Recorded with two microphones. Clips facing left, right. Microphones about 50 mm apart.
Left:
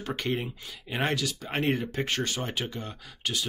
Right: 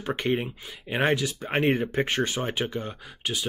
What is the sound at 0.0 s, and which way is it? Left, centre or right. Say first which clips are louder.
Speech: right 4 dB; centre.